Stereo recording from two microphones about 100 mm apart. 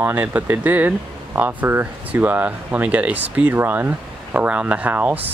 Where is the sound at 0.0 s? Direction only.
20° right (ahead or behind).